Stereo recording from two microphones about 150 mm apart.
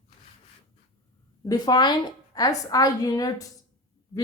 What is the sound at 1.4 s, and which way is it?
Speech, 25° left (ahead or behind).